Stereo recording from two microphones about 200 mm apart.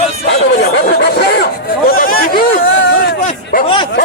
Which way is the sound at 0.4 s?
55° left (ahead or behind).